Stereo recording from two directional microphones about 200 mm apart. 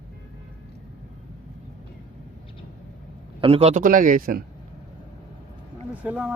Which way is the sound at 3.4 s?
30° right (ahead or behind).